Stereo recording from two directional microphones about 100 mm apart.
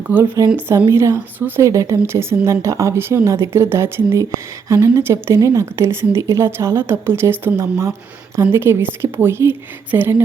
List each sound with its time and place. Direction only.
0.1 s a woman's voice: 25° right (ahead or behind)
1.4 s a woman's voice: 20° right (ahead or behind)
1.6 s a woman's voice: 30° right (ahead or behind)